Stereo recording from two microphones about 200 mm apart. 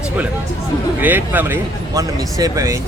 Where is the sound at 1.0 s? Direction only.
10° right (ahead or behind).